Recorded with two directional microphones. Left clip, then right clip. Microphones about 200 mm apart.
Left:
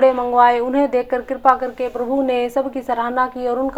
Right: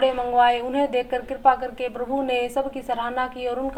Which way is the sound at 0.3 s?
10° left (ahead or behind).